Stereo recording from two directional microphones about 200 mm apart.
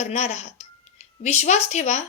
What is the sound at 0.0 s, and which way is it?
Speech, 35° left (ahead or behind).